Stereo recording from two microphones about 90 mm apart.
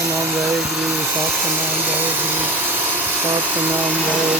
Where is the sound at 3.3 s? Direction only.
20° right (ahead or behind).